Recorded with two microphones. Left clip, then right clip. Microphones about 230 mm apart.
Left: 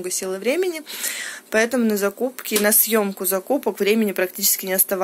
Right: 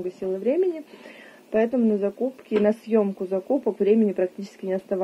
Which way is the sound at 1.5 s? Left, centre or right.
Left.